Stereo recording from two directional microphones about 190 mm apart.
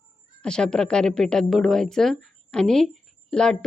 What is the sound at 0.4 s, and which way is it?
A woman's voice, 5° left (ahead or behind).